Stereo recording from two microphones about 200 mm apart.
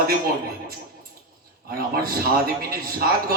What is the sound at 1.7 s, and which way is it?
A man's voice, 50° right (ahead or behind).